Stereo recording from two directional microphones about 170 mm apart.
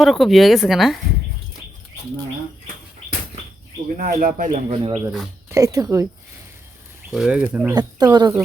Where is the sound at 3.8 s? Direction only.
50° right (ahead or behind).